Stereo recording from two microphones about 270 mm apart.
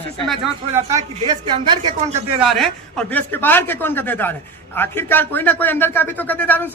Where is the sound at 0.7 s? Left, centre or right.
Centre.